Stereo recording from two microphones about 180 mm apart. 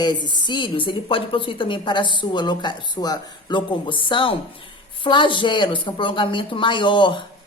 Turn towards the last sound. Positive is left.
turn(degrees=25)  # may be behind; listen again after turning